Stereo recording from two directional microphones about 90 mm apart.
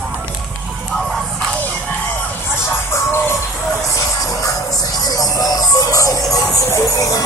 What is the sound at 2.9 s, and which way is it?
Music, 30° left (ahead or behind).